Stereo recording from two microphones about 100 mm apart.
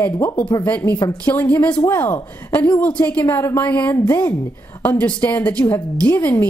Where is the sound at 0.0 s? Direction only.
20° left (ahead or behind).